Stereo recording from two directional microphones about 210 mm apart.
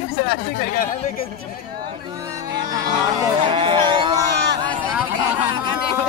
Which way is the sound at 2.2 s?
15° right (ahead or behind).